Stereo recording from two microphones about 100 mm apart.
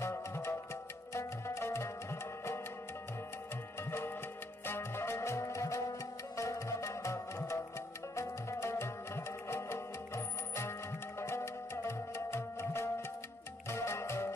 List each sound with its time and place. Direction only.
0.0 s music: 25° left (ahead or behind)
4.6 s music: 25° left (ahead or behind)